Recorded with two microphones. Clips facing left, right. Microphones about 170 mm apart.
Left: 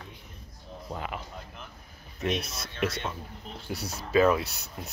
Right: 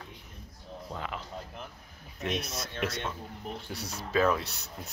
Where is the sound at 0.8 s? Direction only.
10° left (ahead or behind).